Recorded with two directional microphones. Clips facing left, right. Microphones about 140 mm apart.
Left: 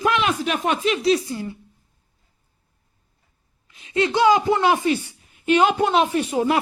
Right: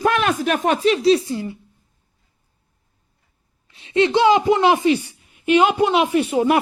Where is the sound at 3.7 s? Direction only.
30° right (ahead or behind).